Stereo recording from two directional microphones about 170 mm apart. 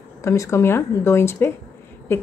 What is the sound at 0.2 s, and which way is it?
A woman's voice, 15° left (ahead or behind).